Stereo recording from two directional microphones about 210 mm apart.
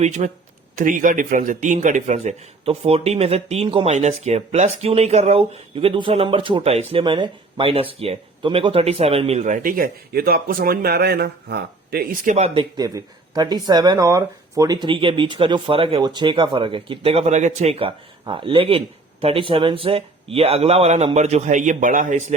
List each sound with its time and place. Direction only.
0.0 s speech: 35° right (ahead or behind)
12.5 s speech: 20° right (ahead or behind); by 22.4 s 35° right (ahead or behind)